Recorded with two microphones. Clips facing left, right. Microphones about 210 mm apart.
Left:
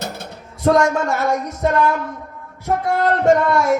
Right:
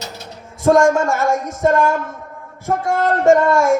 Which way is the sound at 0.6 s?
45° right (ahead or behind).